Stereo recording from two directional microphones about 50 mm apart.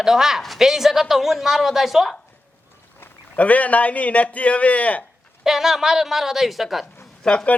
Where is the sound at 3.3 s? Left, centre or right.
Left.